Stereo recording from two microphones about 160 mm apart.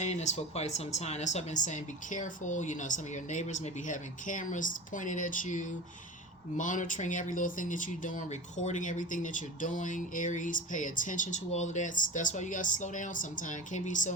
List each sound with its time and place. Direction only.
0.0 s speech: 45° left (ahead or behind)